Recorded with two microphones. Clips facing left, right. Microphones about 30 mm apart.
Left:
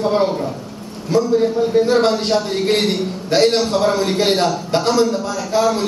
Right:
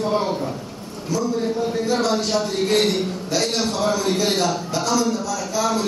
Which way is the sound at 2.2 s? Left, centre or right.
Left.